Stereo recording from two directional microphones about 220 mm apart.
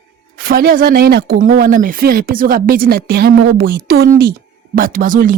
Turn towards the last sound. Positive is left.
turn(degrees=-40)  # may be behind; listen again after turning